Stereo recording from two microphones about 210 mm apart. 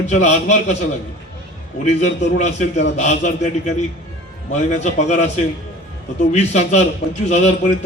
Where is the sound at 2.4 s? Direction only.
35° left (ahead or behind).